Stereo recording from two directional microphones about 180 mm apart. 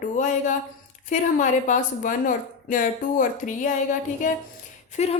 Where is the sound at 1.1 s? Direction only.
45° left (ahead or behind).